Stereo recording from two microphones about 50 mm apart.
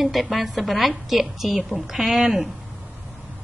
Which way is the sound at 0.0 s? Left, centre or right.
Centre.